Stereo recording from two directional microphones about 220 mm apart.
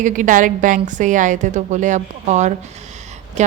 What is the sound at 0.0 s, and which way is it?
A woman's voice, 35° right (ahead or behind).